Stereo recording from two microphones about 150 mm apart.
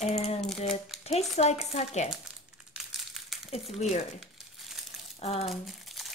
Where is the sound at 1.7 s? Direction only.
50° left (ahead or behind).